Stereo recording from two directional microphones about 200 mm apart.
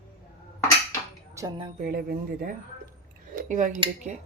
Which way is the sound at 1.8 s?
45° right (ahead or behind).